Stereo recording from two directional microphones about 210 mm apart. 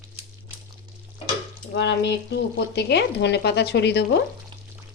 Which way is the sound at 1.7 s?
55° left (ahead or behind).